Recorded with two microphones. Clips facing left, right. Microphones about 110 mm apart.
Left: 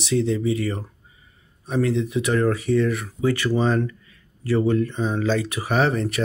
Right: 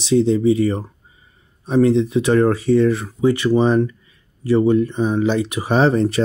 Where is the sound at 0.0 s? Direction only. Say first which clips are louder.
Right 7 dB; 25° right (ahead or behind).